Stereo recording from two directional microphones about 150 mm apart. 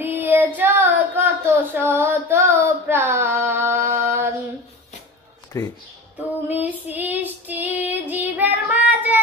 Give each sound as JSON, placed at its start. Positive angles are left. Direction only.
{"t": 0.0, "sound": "child singing", "side_deg": -15}
{"t": 5.5, "sound": "a sound", "side_deg": 20}
{"t": 6.1, "sound": "child singing", "side_deg": -10}